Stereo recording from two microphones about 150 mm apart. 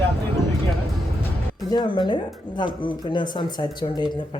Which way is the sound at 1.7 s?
30° left (ahead or behind).